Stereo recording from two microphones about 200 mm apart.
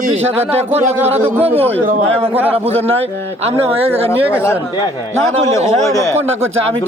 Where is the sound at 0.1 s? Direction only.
30° right (ahead or behind).